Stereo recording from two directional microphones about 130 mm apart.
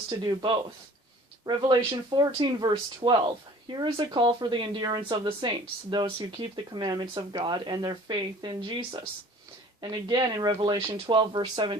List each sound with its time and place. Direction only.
0.1 s speech: 35° right (ahead or behind)